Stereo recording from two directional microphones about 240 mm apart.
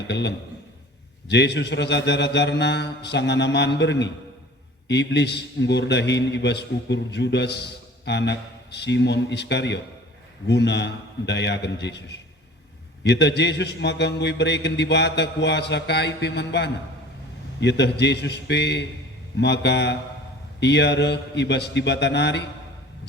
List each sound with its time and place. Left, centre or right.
0.1 s a man's voice: left